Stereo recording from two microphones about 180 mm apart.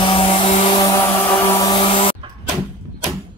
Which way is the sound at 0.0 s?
30° left (ahead or behind).